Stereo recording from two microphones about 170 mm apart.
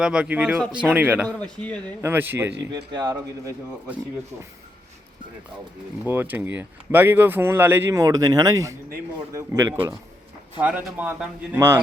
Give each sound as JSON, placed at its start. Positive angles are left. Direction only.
{"t": 0.0, "sound": "speech", "side_deg": -5}
{"t": 1.4, "sound": "speech", "side_deg": 5}
{"t": 2.0, "sound": "speech", "side_deg": -10}
{"t": 2.9, "sound": "speech", "side_deg": -20}
{"t": 6.1, "sound": "speech", "side_deg": -10}